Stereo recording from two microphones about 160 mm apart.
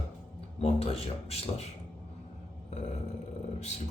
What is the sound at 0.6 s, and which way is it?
Speech, 40° left (ahead or behind).